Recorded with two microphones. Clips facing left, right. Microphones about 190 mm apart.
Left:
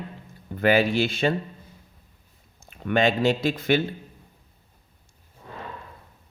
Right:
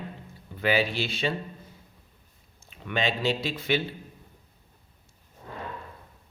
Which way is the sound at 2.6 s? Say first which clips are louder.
Left 7 dB; 50° left (ahead or behind).